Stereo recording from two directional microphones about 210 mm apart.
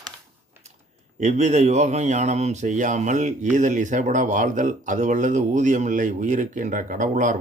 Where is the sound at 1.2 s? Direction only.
35° right (ahead or behind).